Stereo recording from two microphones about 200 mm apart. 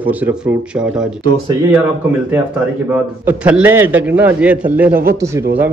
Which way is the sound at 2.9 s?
10° right (ahead or behind).